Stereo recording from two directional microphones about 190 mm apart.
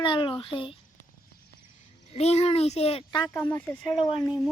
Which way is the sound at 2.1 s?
35° left (ahead or behind).